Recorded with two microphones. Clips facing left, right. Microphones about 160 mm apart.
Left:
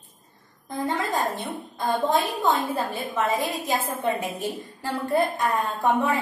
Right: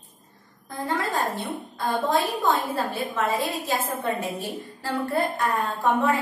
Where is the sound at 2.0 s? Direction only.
20° left (ahead or behind).